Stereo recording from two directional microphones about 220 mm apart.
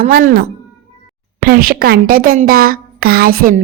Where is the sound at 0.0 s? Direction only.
40° right (ahead or behind).